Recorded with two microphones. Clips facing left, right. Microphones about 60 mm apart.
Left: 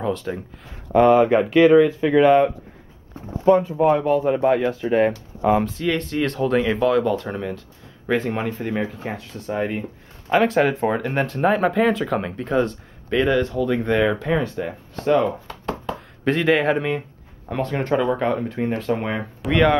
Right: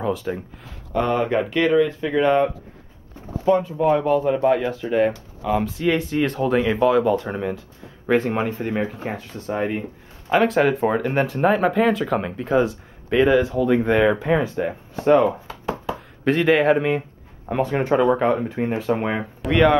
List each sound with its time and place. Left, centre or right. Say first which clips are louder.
0.0 s a sound: right 1 dB; centre
0.9 s speech: left 6 dB; centre
3.5 s speech: left 3 dB; left
3.9 s speech: even; centre
5.6 s speech: right 1 dB; centre